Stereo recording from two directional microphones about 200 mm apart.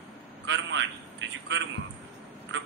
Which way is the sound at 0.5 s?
65° right (ahead or behind).